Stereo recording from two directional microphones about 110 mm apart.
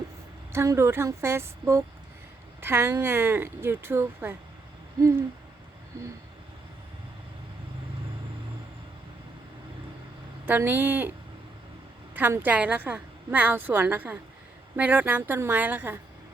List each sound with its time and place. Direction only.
0.5 s speech: 25° right (ahead or behind)
10.4 s a woman's voice: 15° right (ahead or behind)
12.1 s a woman's voice: 15° right (ahead or behind)